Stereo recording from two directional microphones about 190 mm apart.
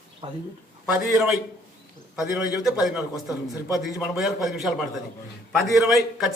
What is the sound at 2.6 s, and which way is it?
A man's voice, centre (ahead or behind).